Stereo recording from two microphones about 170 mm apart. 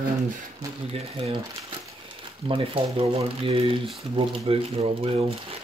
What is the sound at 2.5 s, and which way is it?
Speech, 30° right (ahead or behind).